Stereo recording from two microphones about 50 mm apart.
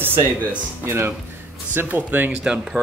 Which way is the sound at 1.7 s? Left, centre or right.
Right.